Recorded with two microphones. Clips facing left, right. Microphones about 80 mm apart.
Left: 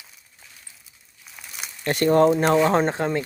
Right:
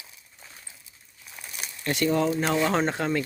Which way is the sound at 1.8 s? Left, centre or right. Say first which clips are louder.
Left 7 dB; left.